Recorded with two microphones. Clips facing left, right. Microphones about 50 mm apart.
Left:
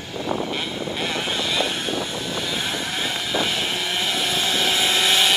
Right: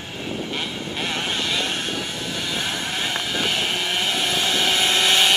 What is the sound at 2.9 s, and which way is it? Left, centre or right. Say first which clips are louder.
Vehicle: even; right.